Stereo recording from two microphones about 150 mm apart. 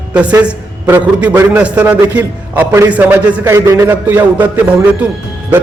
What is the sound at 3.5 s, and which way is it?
A man's voice, 20° right (ahead or behind).